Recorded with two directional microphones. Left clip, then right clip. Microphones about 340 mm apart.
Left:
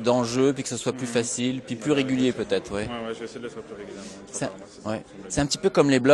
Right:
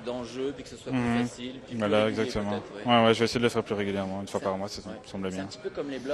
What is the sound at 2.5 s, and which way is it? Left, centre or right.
Speech, left.